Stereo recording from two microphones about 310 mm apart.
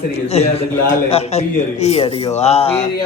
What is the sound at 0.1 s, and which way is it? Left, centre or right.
A man's voice, centre.